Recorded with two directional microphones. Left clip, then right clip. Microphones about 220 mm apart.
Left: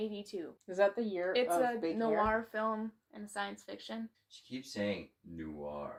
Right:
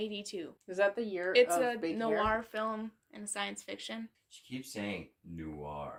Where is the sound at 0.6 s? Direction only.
10° right (ahead or behind).